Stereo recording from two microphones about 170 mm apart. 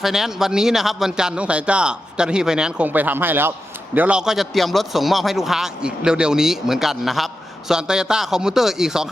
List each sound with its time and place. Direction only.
0.0 s a man's voice: 5° right (ahead or behind)